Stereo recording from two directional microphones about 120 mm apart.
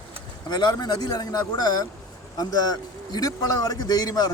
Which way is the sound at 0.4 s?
35° left (ahead or behind).